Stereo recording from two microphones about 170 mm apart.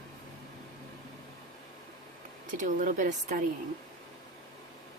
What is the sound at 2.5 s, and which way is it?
Speech, 50° right (ahead or behind).